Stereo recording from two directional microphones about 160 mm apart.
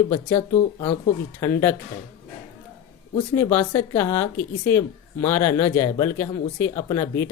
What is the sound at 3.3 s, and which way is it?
Speech, 15° left (ahead or behind).